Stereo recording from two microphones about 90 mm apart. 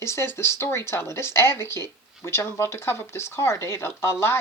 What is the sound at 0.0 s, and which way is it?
Speech, 30° left (ahead or behind).